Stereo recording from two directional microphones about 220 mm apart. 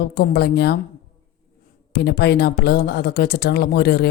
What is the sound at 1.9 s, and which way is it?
Speech, 45° left (ahead or behind).